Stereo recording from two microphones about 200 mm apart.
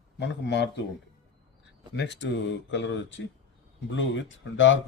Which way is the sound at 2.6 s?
65° left (ahead or behind).